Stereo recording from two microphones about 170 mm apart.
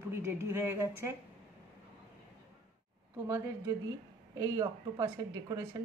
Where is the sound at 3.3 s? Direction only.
15° right (ahead or behind).